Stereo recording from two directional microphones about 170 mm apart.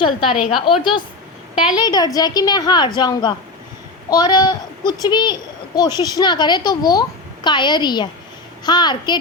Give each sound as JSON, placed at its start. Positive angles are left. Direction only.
{"t": 0.2, "sound": "a woman's voice", "side_deg": 0}
{"t": 1.7, "sound": "a woman's voice", "side_deg": 25}